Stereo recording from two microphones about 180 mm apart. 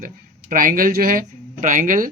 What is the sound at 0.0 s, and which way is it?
Speech, 50° right (ahead or behind).